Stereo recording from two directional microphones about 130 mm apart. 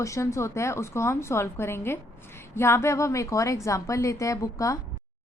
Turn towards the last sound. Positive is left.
turn(degrees=25)  # may be behind; listen again after turning